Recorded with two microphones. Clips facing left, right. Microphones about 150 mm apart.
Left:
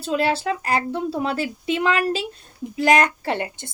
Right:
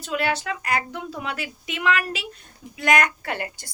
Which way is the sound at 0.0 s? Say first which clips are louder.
Left 4 dB; 30° left (ahead or behind).